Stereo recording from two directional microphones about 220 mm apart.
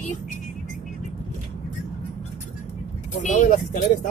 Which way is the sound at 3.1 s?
35° left (ahead or behind).